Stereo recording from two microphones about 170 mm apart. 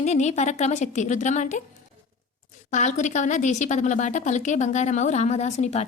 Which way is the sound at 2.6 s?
45° left (ahead or behind).